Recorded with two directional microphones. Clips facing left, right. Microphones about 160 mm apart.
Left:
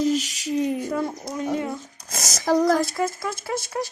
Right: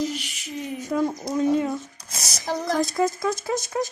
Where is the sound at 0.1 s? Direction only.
40° left (ahead or behind).